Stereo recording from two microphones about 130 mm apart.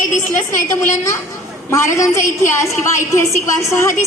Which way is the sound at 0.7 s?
25° left (ahead or behind).